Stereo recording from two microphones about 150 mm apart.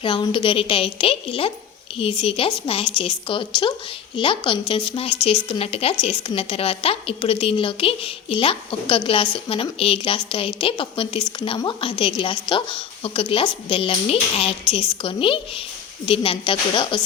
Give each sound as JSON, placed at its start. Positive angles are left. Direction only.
{"t": 0.0, "sound": "speech", "side_deg": 35}